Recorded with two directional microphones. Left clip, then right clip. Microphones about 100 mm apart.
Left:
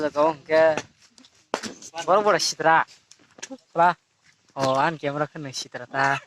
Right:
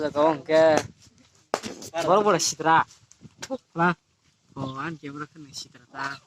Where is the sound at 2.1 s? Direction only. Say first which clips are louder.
Left 2 dB; centre (ahead or behind).